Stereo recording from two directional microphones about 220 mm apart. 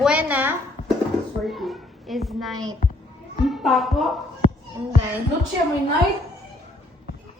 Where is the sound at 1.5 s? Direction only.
Centre (ahead or behind).